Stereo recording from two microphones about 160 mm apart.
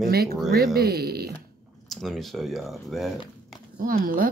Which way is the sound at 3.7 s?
60° right (ahead or behind).